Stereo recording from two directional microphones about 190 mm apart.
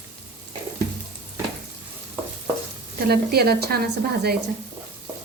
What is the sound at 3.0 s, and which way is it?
Frying, 55° right (ahead or behind).